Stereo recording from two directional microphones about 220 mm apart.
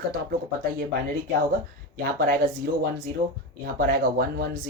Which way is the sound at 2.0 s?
45° right (ahead or behind).